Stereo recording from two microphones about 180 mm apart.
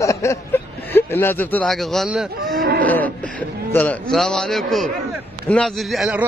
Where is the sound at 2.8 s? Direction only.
10° left (ahead or behind).